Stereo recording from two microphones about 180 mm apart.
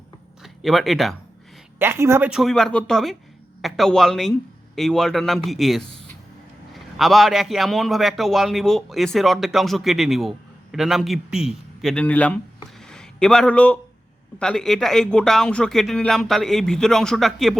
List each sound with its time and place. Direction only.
0.4 s speech: centre (ahead or behind)
1.8 s speech: 15° right (ahead or behind)
2.4 s a man's voice: centre (ahead or behind)
6.9 s a man's voice: centre (ahead or behind)
12.8 s a sound: 5° left (ahead or behind)
14.3 s a man's voice: 5° left (ahead or behind)